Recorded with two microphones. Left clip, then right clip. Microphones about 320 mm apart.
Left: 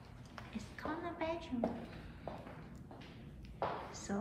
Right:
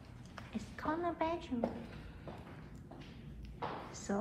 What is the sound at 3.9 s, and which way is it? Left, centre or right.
Speech, centre.